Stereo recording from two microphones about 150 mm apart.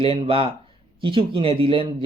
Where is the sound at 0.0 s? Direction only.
35° right (ahead or behind).